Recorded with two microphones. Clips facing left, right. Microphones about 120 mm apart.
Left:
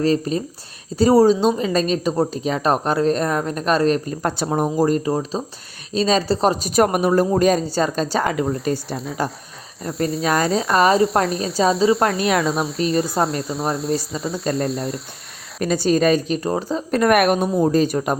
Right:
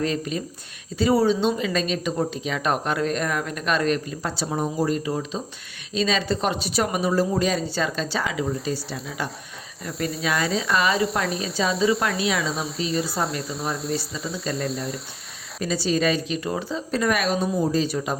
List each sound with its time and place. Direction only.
0.0 s speech: 35° left (ahead or behind)
4.2 s speech: 55° left (ahead or behind); by 11.0 s 40° left (ahead or behind)
11.3 s speech: centre (ahead or behind)
12.0 s speech: 45° left (ahead or behind)
12.4 s speech: centre (ahead or behind)
15.6 s speech: 50° left (ahead or behind)